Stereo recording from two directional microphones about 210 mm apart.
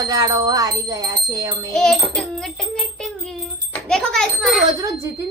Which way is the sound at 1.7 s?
Centre (ahead or behind).